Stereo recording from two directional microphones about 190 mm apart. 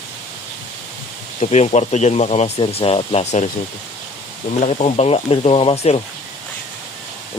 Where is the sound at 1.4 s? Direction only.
35° left (ahead or behind).